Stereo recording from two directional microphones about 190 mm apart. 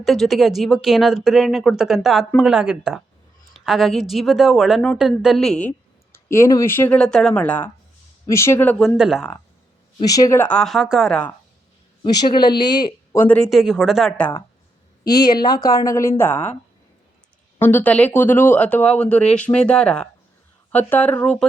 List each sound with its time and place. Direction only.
0.0 s speech: centre (ahead or behind)
10.0 s speech: 20° left (ahead or behind)
12.0 s speech: 25° left (ahead or behind)
13.2 s speech: 5° left (ahead or behind)
15.0 s a woman's voice: 55° left (ahead or behind)
15.3 s speech: 20° left (ahead or behind)
17.6 s speech: 10° left (ahead or behind)